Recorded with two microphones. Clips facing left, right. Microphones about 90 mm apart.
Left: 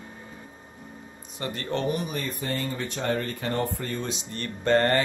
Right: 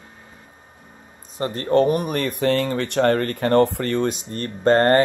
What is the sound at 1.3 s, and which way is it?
Speech, 40° right (ahead or behind).